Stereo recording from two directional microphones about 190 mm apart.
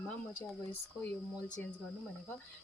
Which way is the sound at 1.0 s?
10° left (ahead or behind).